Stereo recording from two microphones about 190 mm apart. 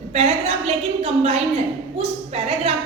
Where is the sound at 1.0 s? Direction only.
30° right (ahead or behind).